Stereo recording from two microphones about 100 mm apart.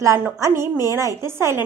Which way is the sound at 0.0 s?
30° right (ahead or behind).